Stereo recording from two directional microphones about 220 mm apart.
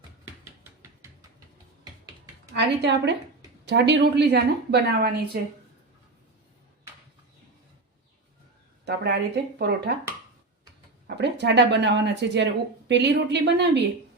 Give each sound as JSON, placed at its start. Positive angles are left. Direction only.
{"t": 2.5, "sound": "a woman's voice", "side_deg": -50}
{"t": 8.8, "sound": "a woman's voice", "side_deg": -50}
{"t": 11.0, "sound": "a woman's voice", "side_deg": -50}